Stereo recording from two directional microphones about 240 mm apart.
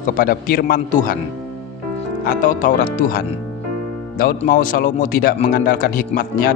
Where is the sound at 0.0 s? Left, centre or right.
Left.